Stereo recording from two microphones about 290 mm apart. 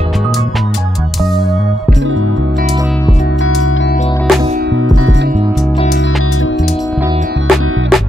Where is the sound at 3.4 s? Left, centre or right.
Left.